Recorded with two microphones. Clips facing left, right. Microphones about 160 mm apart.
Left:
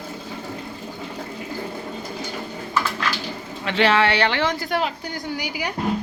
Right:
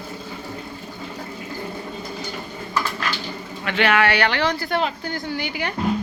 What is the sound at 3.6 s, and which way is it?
Speech, 30° left (ahead or behind).